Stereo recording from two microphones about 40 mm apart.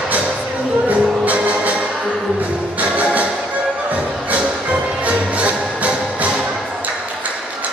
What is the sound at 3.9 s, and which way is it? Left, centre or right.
Music, right.